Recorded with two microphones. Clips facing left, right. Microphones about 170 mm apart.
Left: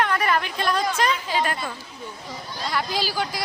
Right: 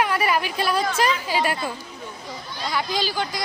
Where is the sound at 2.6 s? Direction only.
Centre (ahead or behind).